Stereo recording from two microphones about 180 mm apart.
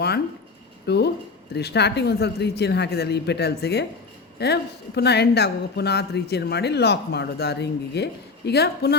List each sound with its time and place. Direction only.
0.9 s a woman's voice: 70° left (ahead or behind)